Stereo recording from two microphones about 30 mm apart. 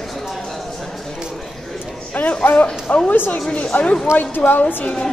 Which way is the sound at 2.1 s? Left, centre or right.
Left.